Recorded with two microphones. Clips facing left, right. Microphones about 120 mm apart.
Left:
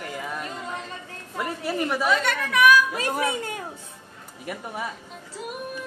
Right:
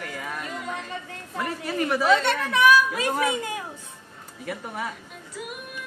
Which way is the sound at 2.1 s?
30° right (ahead or behind).